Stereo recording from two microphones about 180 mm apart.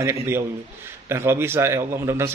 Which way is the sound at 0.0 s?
15° right (ahead or behind).